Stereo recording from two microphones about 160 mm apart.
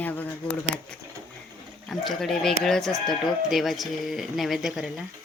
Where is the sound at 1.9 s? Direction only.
Centre (ahead or behind).